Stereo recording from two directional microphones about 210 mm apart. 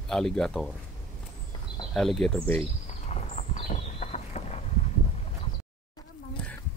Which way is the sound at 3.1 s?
30° left (ahead or behind).